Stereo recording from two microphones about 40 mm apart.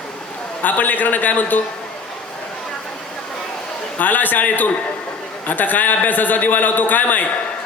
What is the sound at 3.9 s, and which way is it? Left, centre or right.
A man's voice, left.